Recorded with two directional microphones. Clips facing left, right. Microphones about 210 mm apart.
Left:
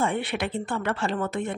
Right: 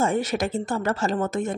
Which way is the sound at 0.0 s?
40° right (ahead or behind).